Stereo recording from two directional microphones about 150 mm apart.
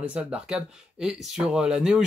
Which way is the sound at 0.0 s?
10° right (ahead or behind).